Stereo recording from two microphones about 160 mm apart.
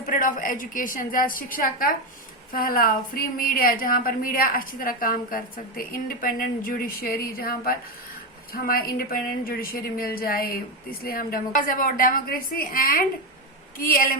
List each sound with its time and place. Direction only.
0.0 s a woman's voice: 60° left (ahead or behind)